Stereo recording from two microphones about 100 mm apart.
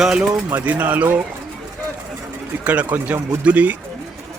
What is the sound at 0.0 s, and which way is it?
Speech, 5° right (ahead or behind).